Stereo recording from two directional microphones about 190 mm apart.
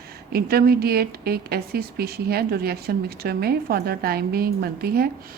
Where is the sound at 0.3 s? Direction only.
55° right (ahead or behind).